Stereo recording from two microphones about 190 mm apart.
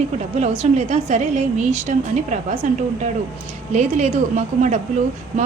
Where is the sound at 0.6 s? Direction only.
35° right (ahead or behind).